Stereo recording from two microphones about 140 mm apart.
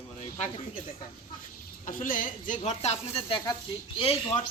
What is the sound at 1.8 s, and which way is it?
Speech, 75° left (ahead or behind).